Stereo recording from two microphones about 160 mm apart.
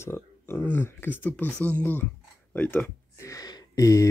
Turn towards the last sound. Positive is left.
turn(degrees=20)  # may be behind; listen again after turning